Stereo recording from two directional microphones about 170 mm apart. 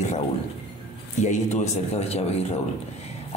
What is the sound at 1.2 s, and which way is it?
A man's voice, 45° left (ahead or behind).